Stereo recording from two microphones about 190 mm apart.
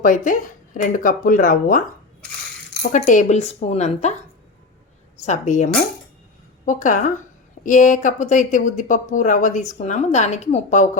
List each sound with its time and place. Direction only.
0.0 s speech: 45° left (ahead or behind)
2.9 s a woman's voice: 40° left (ahead or behind)
5.2 s a woman's voice: 40° left (ahead or behind)